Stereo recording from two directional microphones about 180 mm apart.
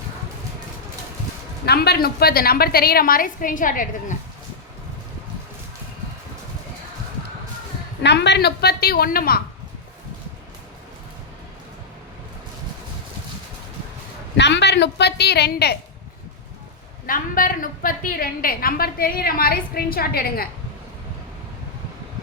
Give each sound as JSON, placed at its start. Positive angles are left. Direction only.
{"t": 1.6, "sound": "a woman's voice", "side_deg": 60}
{"t": 8.0, "sound": "a woman's voice", "side_deg": 70}
{"t": 14.3, "sound": "a woman's voice", "side_deg": 75}
{"t": 17.1, "sound": "a woman's voice", "side_deg": 50}